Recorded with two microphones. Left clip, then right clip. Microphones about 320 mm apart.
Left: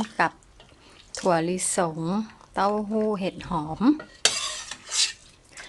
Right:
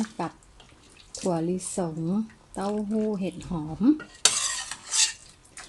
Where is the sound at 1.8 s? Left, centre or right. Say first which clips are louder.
Left 7 dB; left.